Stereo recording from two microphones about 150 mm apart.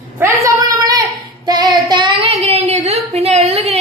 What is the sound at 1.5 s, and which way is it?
Child singing, 30° right (ahead or behind).